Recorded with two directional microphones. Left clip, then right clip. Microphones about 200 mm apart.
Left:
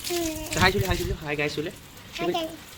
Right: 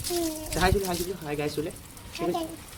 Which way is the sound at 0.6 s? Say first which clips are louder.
Left 3 dB; 15° left (ahead or behind).